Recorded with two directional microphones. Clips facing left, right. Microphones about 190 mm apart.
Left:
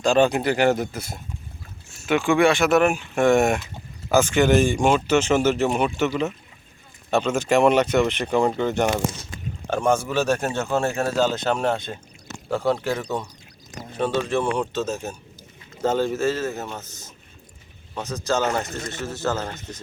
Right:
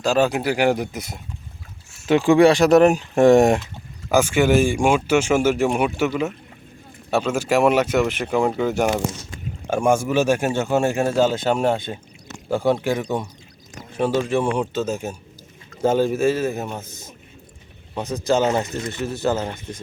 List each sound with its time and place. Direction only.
0.0 s a man's voice: 5° right (ahead or behind)
1.9 s speech: 35° right (ahead or behind)
4.1 s a man's voice: 10° right (ahead or behind)
7.1 s a man's voice: 5° right (ahead or behind)
13.0 s speech: 25° right (ahead or behind)
14.0 s a man's voice: 10° right (ahead or behind)
17.9 s a man's voice: 15° right (ahead or behind)